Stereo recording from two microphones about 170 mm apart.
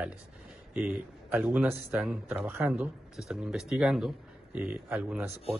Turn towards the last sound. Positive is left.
turn(degrees=-10)  # may be behind; listen again after turning